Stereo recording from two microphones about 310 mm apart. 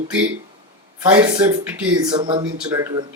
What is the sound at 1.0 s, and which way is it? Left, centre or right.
Speech, centre.